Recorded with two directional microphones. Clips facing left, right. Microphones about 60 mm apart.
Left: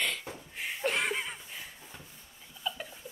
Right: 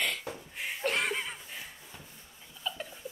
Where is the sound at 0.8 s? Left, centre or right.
Centre.